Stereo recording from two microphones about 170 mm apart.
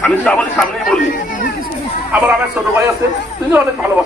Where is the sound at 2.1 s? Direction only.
10° right (ahead or behind).